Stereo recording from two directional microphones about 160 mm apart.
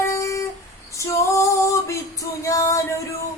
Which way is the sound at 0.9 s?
20° left (ahead or behind).